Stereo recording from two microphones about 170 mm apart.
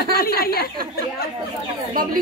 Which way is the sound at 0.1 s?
60° left (ahead or behind).